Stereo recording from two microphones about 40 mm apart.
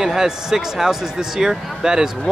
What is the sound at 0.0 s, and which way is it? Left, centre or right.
Speech, centre.